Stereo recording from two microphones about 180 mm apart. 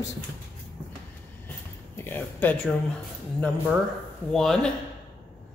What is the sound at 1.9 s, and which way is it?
Speech, 10° left (ahead or behind).